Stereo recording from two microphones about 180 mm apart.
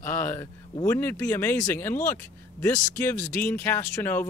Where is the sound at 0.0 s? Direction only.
15° left (ahead or behind).